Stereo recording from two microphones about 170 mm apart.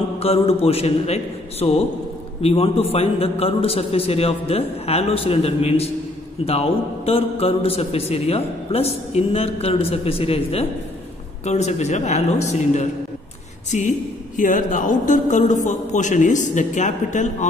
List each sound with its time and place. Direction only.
0.2 s a man's voice: 35° left (ahead or behind)